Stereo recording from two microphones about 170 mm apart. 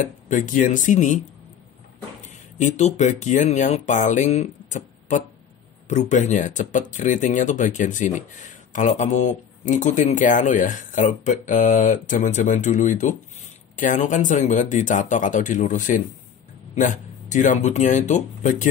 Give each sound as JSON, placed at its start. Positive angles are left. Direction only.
{"t": 0.0, "sound": "speech", "side_deg": 50}